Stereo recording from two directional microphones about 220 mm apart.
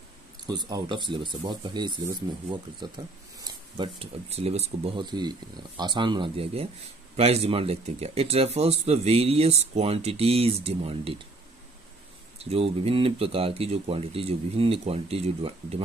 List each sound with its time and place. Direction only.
0.4 s speech: 20° right (ahead or behind)
12.4 s speech: 25° right (ahead or behind)